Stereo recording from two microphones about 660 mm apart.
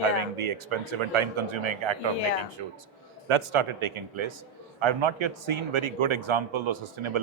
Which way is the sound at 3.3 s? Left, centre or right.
Right.